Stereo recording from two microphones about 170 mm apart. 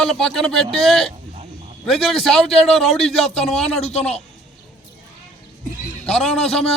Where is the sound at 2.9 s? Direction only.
35° left (ahead or behind).